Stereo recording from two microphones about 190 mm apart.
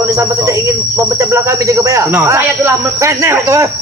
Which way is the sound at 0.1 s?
15° right (ahead or behind).